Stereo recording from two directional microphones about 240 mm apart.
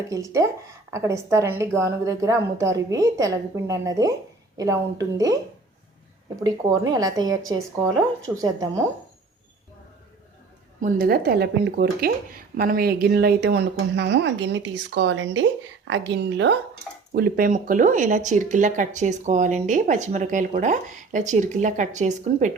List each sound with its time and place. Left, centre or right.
0.1 s a woman's voice: centre
6.4 s a woman's voice: centre
10.8 s speech: right